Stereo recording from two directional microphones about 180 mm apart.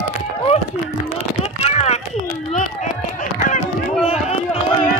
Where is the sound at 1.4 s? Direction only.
35° left (ahead or behind).